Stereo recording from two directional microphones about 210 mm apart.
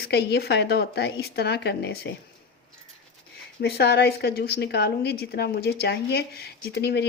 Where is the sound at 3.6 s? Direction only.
50° left (ahead or behind).